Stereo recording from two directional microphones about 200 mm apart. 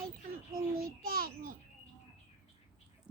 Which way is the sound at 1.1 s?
45° right (ahead or behind).